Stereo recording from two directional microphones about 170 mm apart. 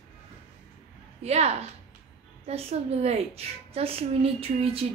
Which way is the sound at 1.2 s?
40° right (ahead or behind).